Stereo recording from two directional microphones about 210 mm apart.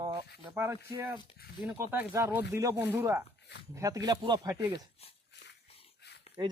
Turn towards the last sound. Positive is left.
turn(degrees=50)  # may be behind; listen again after turning